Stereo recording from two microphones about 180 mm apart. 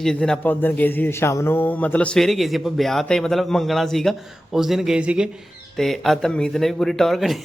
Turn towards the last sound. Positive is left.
turn(degrees=0)  # may be behind; listen again after turning